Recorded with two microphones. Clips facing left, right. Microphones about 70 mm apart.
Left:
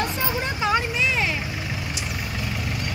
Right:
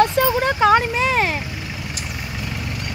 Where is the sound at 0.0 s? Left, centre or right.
Right.